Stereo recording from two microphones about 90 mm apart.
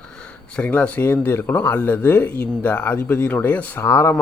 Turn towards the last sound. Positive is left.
turn(degrees=30)  # may be behind; listen again after turning